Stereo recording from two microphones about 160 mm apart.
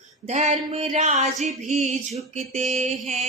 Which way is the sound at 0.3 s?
45° right (ahead or behind).